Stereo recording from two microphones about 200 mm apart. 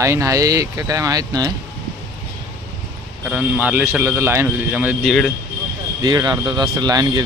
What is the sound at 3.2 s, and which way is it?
A man's voice, 5° right (ahead or behind).